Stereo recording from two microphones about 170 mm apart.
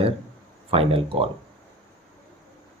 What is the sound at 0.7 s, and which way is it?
Speech, 35° right (ahead or behind).